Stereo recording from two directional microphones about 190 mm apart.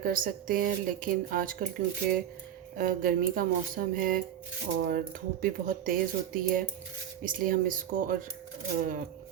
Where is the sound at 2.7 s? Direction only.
50° right (ahead or behind).